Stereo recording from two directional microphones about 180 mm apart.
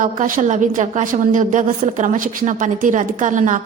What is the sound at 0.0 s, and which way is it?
A woman's voice, 45° right (ahead or behind).